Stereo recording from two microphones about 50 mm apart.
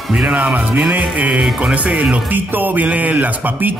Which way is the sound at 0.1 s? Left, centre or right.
Centre.